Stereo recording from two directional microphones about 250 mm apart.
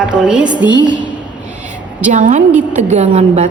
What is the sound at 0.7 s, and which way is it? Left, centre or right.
Speech, centre.